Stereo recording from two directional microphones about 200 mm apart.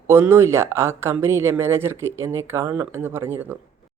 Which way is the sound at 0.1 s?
10° right (ahead or behind).